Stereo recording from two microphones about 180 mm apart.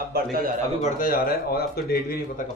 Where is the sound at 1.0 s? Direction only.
55° left (ahead or behind).